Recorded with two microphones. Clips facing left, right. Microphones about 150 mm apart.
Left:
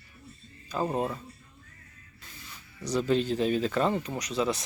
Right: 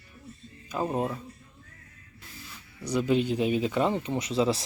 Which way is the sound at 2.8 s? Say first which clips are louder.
Right 1 dB; 10° right (ahead or behind).